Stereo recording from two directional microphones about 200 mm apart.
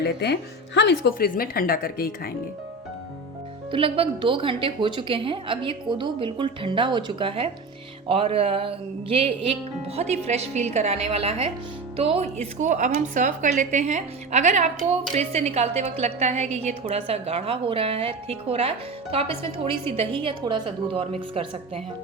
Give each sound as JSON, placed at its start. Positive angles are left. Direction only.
{"t": 0.0, "sound": "speech", "side_deg": 55}
{"t": 3.7, "sound": "a woman's voice", "side_deg": -25}